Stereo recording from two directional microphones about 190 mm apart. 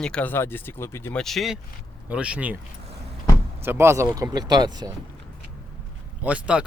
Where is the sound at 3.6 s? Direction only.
10° right (ahead or behind).